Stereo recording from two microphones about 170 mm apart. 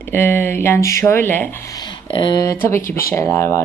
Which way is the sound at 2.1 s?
25° left (ahead or behind).